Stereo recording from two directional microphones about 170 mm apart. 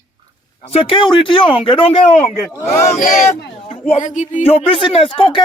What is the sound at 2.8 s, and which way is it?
A man's voice, 45° left (ahead or behind).